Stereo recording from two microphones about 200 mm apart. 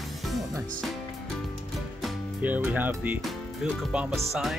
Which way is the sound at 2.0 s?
10° right (ahead or behind).